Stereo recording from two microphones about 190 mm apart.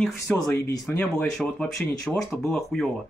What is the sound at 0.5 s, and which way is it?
Speech, 15° left (ahead or behind).